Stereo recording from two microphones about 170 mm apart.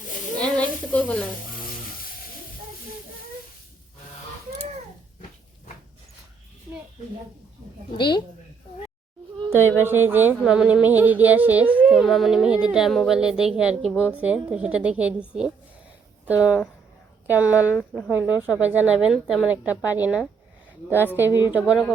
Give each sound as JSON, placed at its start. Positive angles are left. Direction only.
{"t": 0.3, "sound": "sizzle", "side_deg": 5}
{"t": 7.9, "sound": "a woman's voice", "side_deg": 25}
{"t": 9.5, "sound": "speech", "side_deg": -15}
{"t": 17.7, "sound": "speech", "side_deg": 5}
{"t": 18.1, "sound": "speech", "side_deg": -10}